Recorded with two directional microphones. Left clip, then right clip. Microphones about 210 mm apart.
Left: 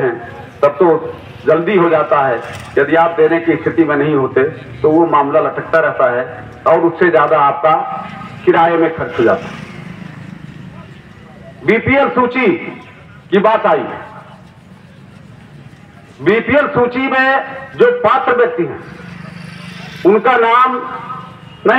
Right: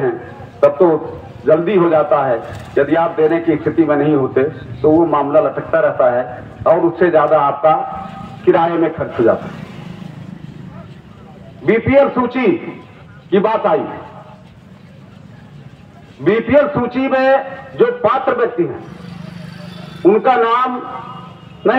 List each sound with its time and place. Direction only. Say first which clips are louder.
0.6 s a man's voice: left 1 dB; 50° right (ahead or behind)
11.6 s a man's voice: even; 55° right (ahead or behind)
16.3 s a man's voice: even; 55° right (ahead or behind)
19.4 s vehicle: left 3 dB; 30° right (ahead or behind); by 20.7 s 55° right (ahead or behind)
21.6 s a man's voice: left 3 dB; 50° right (ahead or behind)